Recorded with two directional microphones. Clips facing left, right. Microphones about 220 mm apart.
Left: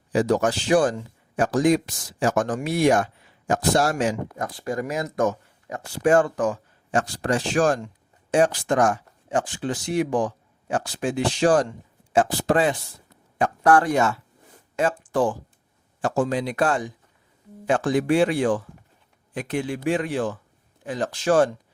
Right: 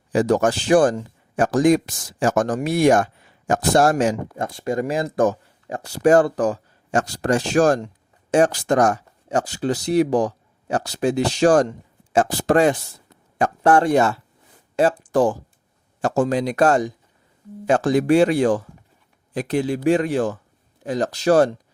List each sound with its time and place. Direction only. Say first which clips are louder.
0.1 s speech: right 3 dB; 50° right (ahead or behind)
4.4 s speech: right 4 dB; 25° right (ahead or behind); by 12.7 s 45° right (ahead or behind)
13.7 s speech: right 3 dB; 25° right (ahead or behind)